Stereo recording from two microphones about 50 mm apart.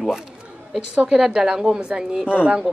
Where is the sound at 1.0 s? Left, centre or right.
Centre.